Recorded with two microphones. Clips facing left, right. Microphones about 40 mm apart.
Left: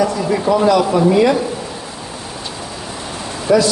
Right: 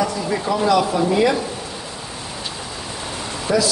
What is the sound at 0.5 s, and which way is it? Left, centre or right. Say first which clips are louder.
Speech: left 5 dB; left.